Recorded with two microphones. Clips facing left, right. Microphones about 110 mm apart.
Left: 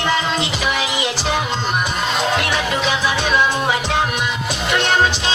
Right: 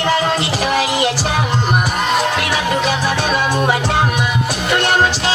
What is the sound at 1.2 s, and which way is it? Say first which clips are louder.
Music: right 2 dB; 10° right (ahead or behind).